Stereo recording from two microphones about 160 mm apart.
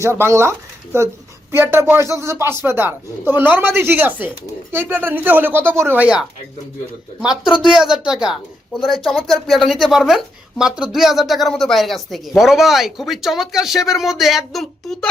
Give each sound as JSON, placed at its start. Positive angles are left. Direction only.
{"t": 0.0, "sound": "speech", "side_deg": -15}